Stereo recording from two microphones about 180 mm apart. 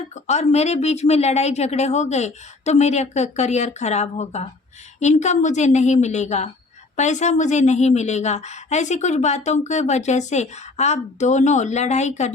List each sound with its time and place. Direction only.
0.1 s a woman's voice: 40° left (ahead or behind)